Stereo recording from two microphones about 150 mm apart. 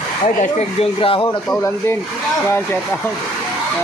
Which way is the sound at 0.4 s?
45° left (ahead or behind).